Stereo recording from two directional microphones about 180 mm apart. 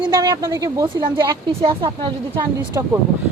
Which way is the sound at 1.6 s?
30° right (ahead or behind).